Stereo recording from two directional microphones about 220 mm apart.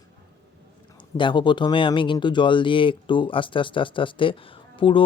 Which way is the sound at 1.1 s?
20° left (ahead or behind).